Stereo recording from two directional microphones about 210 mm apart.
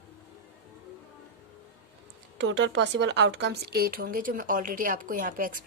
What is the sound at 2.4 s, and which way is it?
Speech, 55° right (ahead or behind).